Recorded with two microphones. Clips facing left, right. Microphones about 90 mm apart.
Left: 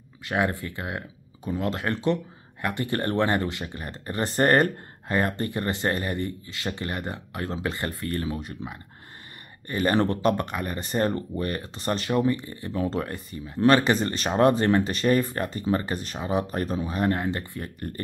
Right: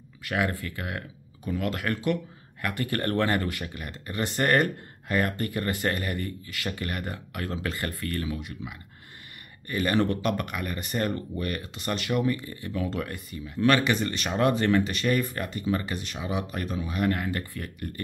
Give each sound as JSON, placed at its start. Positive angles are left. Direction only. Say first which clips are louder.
{"t": 0.2, "sound": "speech", "louder": "left 2 dB", "side_deg": 25}